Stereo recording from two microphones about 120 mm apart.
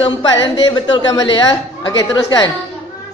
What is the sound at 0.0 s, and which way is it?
A woman's voice, 40° left (ahead or behind).